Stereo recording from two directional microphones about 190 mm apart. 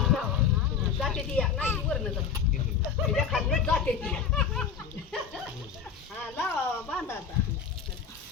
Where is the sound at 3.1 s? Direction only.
Centre (ahead or behind).